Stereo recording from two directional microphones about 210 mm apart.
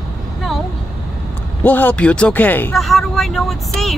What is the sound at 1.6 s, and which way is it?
Speech, 10° left (ahead or behind).